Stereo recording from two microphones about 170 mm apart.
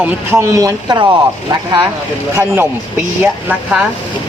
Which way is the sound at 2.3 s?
15° right (ahead or behind).